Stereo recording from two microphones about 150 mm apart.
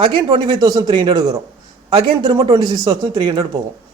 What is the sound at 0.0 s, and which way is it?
A man's voice, 30° right (ahead or behind).